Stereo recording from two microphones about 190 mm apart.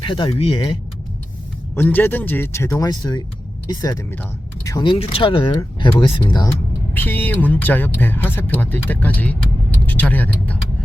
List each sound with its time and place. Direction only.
0.0 s speech: 25° left (ahead or behind)
1.7 s speech: 10° left (ahead or behind)
6.9 s speech: 10° left (ahead or behind)